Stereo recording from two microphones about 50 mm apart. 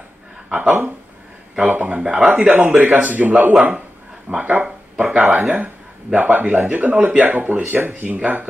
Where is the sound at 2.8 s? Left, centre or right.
Right.